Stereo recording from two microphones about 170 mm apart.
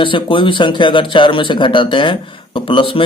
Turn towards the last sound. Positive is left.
turn(degrees=30)  # may be behind; listen again after turning